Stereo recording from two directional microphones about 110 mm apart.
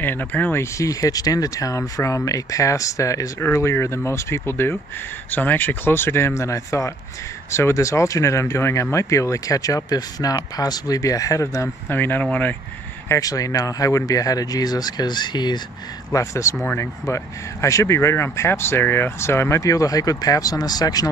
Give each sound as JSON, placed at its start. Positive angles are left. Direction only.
{"t": 0.0, "sound": "speech", "side_deg": 15}
{"t": 13.1, "sound": "speech", "side_deg": 30}
{"t": 16.1, "sound": "speech", "side_deg": 30}